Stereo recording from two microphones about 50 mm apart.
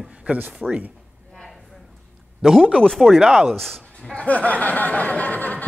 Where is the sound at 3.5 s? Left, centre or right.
Centre.